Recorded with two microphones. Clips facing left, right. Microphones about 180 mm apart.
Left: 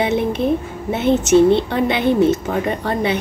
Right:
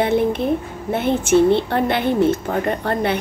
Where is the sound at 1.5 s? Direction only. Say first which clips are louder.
Left 1 dB; 55° right (ahead or behind).